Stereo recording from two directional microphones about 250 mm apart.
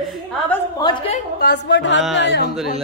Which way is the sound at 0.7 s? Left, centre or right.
Centre.